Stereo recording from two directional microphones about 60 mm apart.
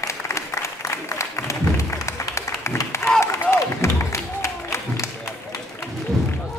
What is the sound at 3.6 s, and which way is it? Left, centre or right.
Music, left.